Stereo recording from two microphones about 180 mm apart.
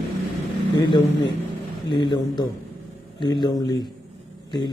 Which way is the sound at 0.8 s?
20° left (ahead or behind).